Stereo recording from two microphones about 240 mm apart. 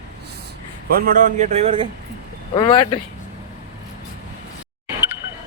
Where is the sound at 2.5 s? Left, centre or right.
Centre.